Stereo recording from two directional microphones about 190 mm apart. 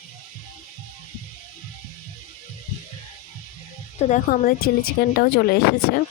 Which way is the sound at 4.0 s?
40° left (ahead or behind).